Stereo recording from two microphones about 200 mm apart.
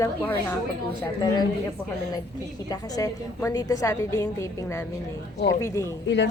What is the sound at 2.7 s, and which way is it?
A woman's voice, 20° left (ahead or behind).